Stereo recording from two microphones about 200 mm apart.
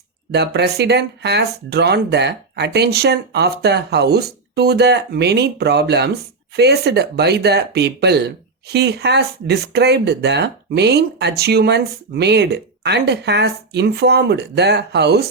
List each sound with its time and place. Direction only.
0.3 s speech: 55° right (ahead or behind)